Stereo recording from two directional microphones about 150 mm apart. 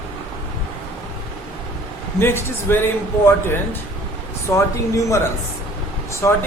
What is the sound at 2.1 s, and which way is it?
Speech, 15° left (ahead or behind).